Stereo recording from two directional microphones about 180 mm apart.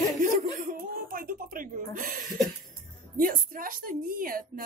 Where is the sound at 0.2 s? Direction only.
50° right (ahead or behind).